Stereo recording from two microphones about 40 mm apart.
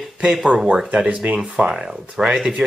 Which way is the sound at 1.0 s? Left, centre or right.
Right.